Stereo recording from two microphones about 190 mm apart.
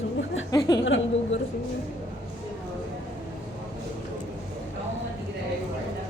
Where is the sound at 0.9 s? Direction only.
75° left (ahead or behind).